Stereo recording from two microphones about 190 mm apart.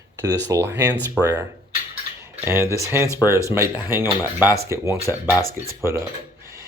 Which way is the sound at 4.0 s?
20° left (ahead or behind).